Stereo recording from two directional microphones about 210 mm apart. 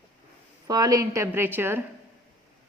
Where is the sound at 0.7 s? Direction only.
20° right (ahead or behind).